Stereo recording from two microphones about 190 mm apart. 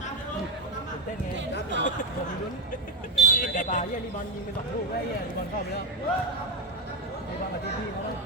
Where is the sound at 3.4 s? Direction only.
45° left (ahead or behind).